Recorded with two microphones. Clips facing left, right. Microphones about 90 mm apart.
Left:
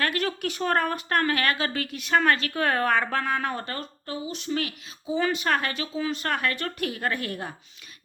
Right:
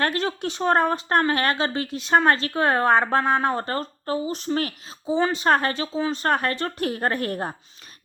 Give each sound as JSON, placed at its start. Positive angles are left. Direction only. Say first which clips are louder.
{"t": 0.0, "sound": "speech", "louder": "right 3 dB", "side_deg": -30}